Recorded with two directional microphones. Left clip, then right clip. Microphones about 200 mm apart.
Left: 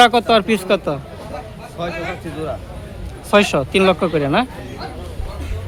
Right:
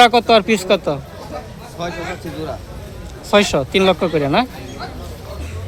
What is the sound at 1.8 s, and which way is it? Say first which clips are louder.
Speech: even; 30° left (ahead or behind).